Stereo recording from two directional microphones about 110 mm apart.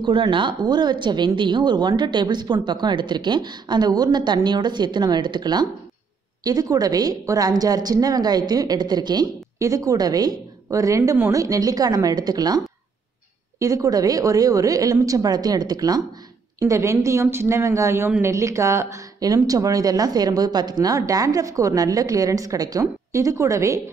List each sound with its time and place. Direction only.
0.0 s a woman's voice: 45° right (ahead or behind); by 23.8 s 30° right (ahead or behind)